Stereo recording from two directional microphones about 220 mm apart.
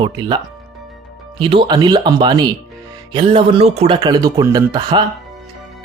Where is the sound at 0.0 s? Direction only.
20° right (ahead or behind).